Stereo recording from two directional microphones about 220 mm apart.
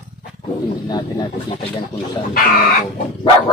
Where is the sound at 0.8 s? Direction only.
20° left (ahead or behind).